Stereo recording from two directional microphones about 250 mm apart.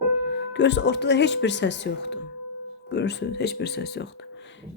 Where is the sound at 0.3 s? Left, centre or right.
Left.